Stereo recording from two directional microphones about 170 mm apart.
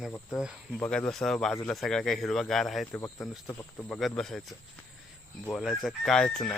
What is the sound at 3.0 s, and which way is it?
A man's voice, 15° left (ahead or behind).